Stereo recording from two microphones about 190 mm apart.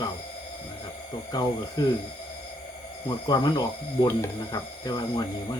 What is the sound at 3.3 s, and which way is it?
Speech, 20° left (ahead or behind).